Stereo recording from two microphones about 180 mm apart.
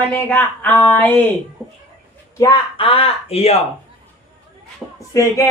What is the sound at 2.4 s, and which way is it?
Speech, 25° left (ahead or behind).